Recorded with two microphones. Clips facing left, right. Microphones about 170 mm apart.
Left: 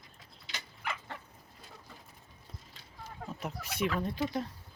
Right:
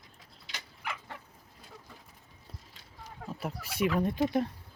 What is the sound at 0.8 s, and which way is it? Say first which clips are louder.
Dog: left 1 dB; 10° right (ahead or behind).